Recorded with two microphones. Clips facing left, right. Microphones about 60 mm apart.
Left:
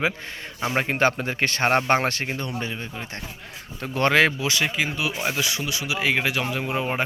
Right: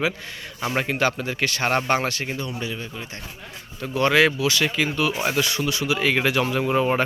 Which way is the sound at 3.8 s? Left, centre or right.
Left.